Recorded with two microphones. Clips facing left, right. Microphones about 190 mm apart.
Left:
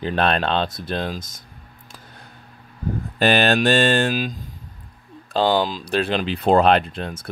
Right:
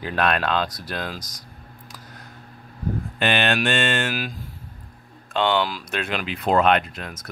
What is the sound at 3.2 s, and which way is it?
Mantra, 35° left (ahead or behind).